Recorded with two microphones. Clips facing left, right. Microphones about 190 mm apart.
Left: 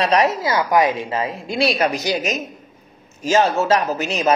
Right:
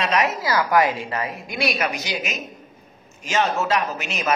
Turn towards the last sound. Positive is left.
turn(degrees=35)  # may be behind; listen again after turning